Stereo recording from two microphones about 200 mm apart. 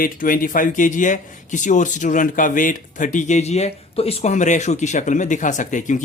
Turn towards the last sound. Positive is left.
turn(degrees=40)  # may be behind; listen again after turning